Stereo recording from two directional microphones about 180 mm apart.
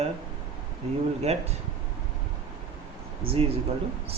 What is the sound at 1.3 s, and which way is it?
Speech, 35° right (ahead or behind).